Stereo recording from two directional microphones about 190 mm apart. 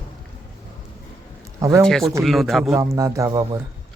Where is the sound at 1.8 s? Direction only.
Centre (ahead or behind).